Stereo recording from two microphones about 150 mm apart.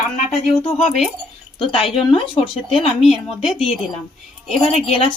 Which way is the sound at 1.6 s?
35° left (ahead or behind).